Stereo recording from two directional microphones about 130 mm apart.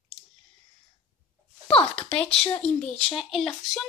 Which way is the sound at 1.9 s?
10° left (ahead or behind).